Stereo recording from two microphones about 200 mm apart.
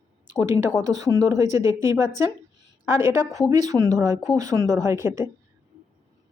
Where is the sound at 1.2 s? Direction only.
15° right (ahead or behind).